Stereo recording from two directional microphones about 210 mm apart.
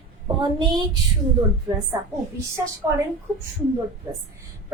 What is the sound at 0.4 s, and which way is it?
Speech, 20° right (ahead or behind).